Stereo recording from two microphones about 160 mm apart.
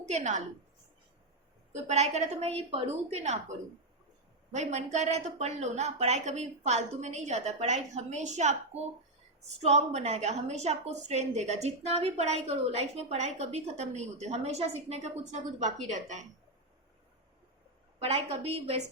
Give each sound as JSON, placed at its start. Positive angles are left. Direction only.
{"t": 0.0, "sound": "a woman's voice", "side_deg": -45}
{"t": 1.7, "sound": "a woman's voice", "side_deg": -45}
{"t": 4.5, "sound": "a woman's voice", "side_deg": -45}
{"t": 18.0, "sound": "a woman's voice", "side_deg": -40}